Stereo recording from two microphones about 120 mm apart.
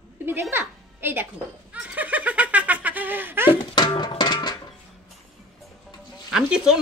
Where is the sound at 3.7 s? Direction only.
35° left (ahead or behind).